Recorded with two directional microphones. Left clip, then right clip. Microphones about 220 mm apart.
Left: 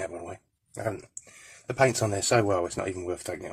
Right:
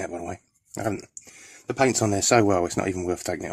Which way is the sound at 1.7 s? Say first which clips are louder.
Right 2 dB; 50° right (ahead or behind).